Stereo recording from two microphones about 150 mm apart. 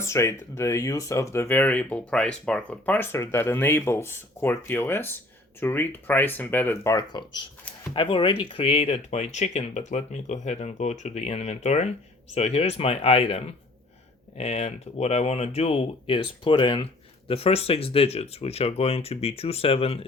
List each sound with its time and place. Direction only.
0.0 s speech: 20° left (ahead or behind)
6.9 s speech: 30° left (ahead or behind)